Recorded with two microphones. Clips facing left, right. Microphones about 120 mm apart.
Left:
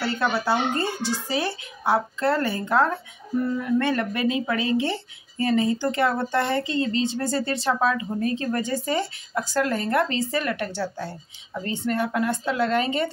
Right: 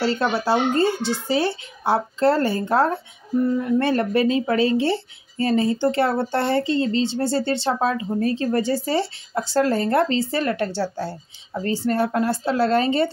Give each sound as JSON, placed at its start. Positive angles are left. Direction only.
{"t": 0.0, "sound": "speech", "side_deg": -25}